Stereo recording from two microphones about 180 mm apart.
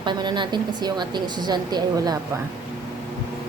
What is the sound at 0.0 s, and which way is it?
A woman's voice, 25° right (ahead or behind).